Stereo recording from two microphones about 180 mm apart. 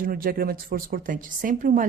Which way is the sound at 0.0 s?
55° right (ahead or behind).